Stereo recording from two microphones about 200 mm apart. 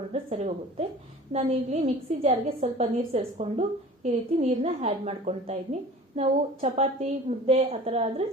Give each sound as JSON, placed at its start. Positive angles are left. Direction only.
{"t": 0.1, "sound": "a woman's voice", "side_deg": -35}